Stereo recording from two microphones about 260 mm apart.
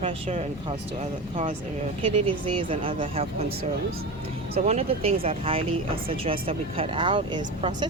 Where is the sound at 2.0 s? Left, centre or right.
Right.